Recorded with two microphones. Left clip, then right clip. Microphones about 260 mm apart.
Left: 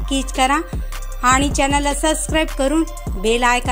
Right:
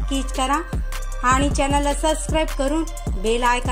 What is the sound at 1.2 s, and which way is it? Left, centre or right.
Speech, left.